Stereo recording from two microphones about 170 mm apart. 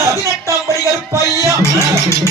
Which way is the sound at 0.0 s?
15° right (ahead or behind).